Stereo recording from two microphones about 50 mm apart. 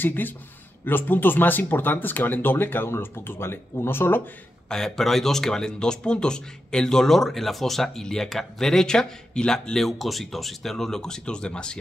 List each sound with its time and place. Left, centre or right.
0.0 s speech: left
4.6 s speech: centre
9.8 s speech: centre